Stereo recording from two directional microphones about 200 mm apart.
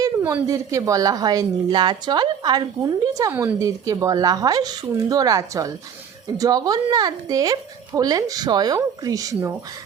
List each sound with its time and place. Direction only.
0.0 s a woman's voice: 10° right (ahead or behind)